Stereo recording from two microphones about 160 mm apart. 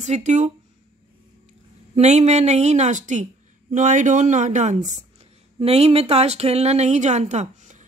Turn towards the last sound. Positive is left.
turn(degrees=-50)  # may be behind; listen again after turning